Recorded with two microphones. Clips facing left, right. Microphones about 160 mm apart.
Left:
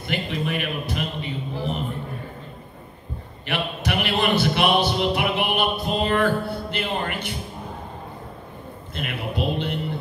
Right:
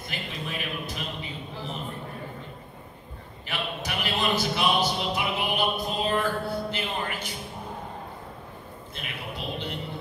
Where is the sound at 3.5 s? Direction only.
65° left (ahead or behind).